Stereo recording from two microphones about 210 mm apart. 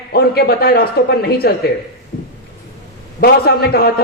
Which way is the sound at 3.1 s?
50° left (ahead or behind).